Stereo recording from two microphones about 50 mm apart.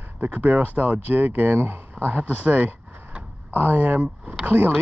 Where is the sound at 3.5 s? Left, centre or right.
Right.